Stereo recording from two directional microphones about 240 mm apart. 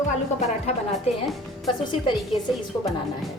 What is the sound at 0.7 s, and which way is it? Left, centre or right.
Speech, left.